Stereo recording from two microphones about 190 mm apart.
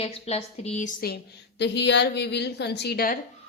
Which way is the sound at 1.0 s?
55° left (ahead or behind).